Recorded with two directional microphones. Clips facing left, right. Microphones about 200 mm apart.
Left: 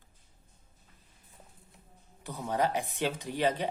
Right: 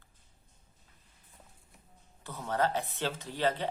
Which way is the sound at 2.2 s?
15° left (ahead or behind).